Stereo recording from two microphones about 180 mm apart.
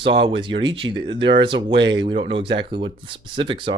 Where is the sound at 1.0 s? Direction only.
90° right.